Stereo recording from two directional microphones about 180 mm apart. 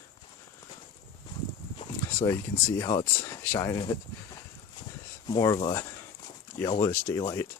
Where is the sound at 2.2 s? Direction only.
15° left (ahead or behind).